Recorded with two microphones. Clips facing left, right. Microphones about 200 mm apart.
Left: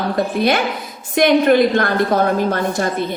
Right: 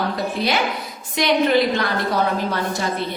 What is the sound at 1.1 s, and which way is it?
A woman's voice, 50° left (ahead or behind).